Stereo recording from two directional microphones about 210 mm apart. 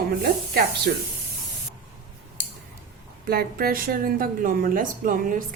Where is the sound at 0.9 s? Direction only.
50° right (ahead or behind).